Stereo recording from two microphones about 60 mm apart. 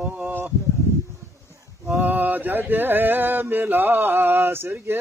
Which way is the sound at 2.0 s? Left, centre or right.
Right.